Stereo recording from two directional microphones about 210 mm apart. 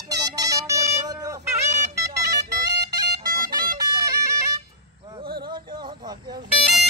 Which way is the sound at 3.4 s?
20° right (ahead or behind).